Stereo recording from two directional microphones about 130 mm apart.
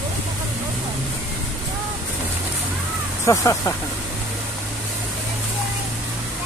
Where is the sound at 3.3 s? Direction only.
25° left (ahead or behind).